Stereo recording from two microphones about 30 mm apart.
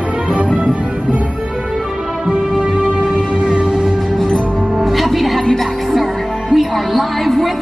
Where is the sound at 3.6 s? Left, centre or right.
Centre.